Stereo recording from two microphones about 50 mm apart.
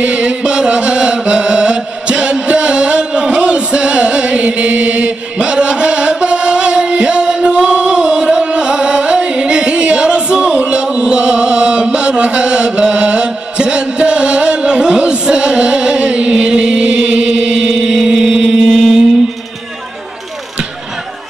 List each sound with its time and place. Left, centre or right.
0.0 s chant: right